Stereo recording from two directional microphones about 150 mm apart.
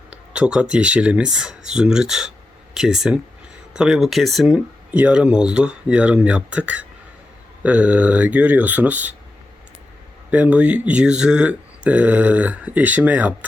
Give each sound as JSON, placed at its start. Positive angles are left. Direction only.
{"t": 0.1, "sound": "speech", "side_deg": -5}
{"t": 10.3, "sound": "speech", "side_deg": -10}